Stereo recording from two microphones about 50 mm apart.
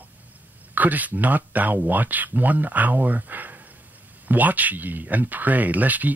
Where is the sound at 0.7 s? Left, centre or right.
Right.